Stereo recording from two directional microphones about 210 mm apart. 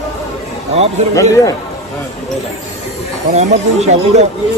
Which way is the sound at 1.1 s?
15° left (ahead or behind).